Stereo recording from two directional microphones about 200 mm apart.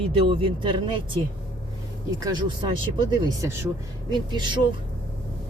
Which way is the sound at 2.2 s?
20° right (ahead or behind).